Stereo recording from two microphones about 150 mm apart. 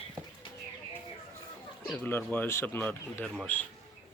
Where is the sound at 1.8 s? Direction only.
10° left (ahead or behind).